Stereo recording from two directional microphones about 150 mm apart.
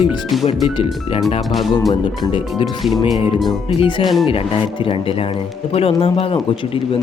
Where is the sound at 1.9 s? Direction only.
30° left (ahead or behind).